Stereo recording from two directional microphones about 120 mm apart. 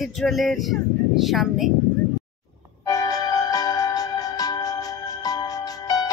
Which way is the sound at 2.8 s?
30° left (ahead or behind).